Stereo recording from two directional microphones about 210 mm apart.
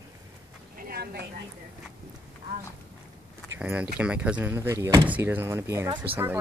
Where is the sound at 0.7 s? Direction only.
45° right (ahead or behind).